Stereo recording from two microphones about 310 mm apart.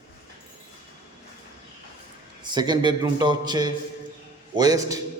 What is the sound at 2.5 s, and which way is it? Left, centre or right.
A man's voice, centre.